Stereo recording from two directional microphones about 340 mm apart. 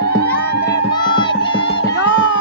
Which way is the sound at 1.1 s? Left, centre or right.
Centre.